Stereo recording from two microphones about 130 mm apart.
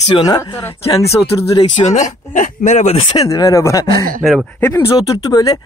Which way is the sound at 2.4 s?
65° left (ahead or behind).